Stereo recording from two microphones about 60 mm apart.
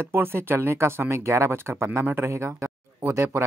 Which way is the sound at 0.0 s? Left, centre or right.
Right.